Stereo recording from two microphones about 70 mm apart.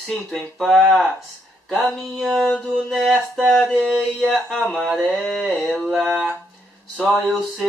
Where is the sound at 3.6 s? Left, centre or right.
Centre.